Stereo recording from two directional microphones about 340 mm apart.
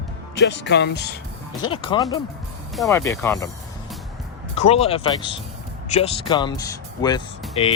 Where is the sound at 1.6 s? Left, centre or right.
Centre.